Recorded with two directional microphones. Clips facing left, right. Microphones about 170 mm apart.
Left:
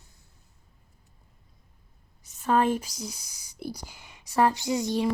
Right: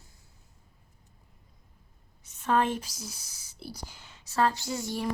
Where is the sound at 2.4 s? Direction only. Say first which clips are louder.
Left 3 dB; 5° left (ahead or behind).